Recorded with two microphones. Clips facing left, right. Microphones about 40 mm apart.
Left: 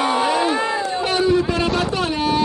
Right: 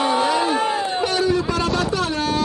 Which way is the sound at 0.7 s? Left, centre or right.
Right.